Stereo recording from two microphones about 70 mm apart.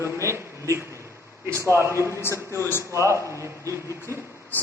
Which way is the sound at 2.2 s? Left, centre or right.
Left.